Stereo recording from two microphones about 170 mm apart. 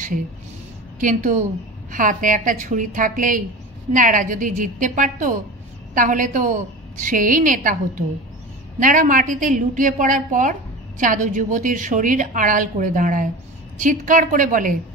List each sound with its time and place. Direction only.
0.9 s a woman's voice: 50° right (ahead or behind)